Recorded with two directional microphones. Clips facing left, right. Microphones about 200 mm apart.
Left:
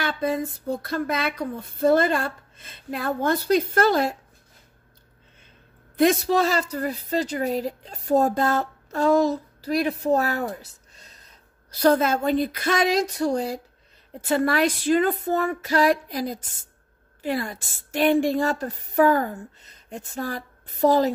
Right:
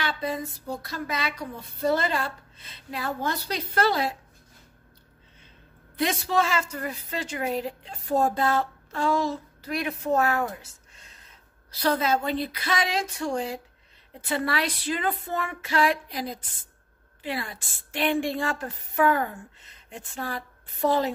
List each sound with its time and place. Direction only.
0.0 s speech: 50° left (ahead or behind)
5.9 s a woman's voice: 45° left (ahead or behind)